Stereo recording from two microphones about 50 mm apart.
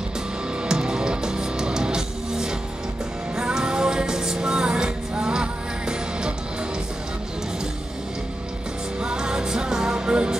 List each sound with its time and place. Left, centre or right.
0.7 s music: centre
9.0 s music: centre